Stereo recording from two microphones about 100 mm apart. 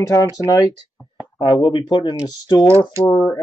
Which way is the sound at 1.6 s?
50° left (ahead or behind).